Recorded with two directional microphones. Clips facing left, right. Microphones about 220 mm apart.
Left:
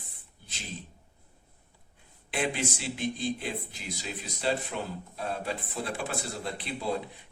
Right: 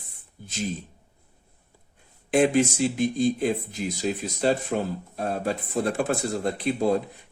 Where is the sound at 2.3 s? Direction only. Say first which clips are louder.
Right 11 dB; 45° right (ahead or behind).